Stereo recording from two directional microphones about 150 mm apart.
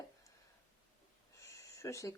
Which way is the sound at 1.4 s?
20° left (ahead or behind).